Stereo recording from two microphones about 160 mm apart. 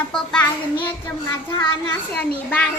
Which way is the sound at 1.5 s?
15° left (ahead or behind).